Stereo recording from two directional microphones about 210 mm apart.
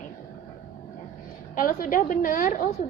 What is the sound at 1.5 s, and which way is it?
Speech, 40° left (ahead or behind).